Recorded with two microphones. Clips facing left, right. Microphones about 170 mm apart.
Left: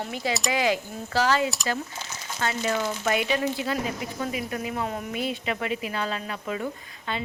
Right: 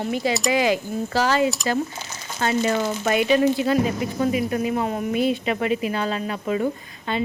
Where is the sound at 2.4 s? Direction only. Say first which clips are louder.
Right 5 dB; 30° right (ahead or behind).